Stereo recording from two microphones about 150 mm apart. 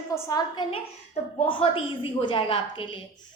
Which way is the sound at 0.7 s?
40° left (ahead or behind).